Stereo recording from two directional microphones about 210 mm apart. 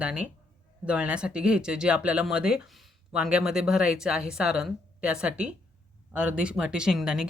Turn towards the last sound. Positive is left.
turn(degrees=-5)  # may be behind; listen again after turning